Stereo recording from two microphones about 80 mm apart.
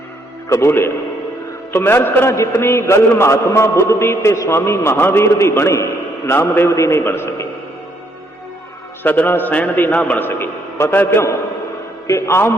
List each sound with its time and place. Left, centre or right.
0.4 s a man's voice: left
9.0 s a man's voice: left